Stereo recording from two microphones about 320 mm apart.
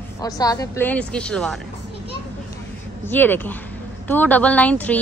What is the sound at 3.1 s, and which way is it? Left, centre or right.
A woman's voice, centre.